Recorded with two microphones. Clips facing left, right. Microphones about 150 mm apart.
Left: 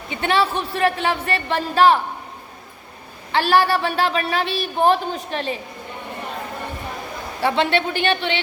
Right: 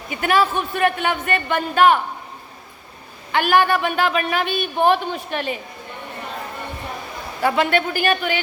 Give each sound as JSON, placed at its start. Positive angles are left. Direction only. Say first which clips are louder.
{"t": 0.1, "sound": "a woman's voice", "louder": "right 1 dB", "side_deg": 30}
{"t": 3.3, "sound": "a woman's voice", "louder": "even", "side_deg": 30}
{"t": 7.4, "sound": "a woman's voice", "louder": "right 1 dB", "side_deg": 30}